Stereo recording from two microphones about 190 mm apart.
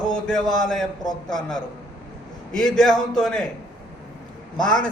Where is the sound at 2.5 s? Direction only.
5° left (ahead or behind).